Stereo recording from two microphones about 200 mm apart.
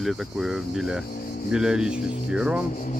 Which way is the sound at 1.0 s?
45° left (ahead or behind).